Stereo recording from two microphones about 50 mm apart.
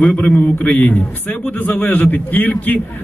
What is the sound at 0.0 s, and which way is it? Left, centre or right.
A man's voice, centre.